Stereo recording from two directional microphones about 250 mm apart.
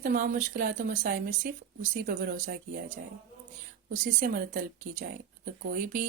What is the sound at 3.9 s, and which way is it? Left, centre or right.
Speech, right.